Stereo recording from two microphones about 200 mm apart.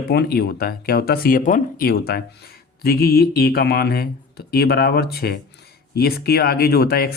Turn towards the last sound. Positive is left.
turn(degrees=50)  # may be behind; listen again after turning